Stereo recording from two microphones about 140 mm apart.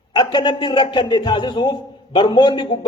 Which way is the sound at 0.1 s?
30° left (ahead or behind).